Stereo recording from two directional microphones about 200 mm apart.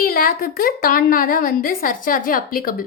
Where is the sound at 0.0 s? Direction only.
45° left (ahead or behind).